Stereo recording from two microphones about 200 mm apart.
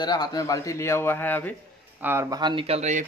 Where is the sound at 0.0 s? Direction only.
20° left (ahead or behind).